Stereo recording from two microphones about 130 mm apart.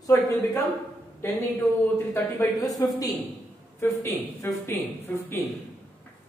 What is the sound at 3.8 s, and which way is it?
A man's voice, 20° left (ahead or behind).